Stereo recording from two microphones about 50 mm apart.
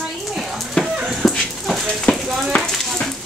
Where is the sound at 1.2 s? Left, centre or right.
Centre.